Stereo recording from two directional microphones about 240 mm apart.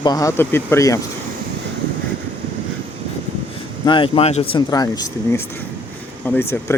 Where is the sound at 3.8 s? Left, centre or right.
Left.